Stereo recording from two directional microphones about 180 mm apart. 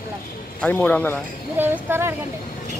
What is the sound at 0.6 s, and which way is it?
Speech, 10° left (ahead or behind).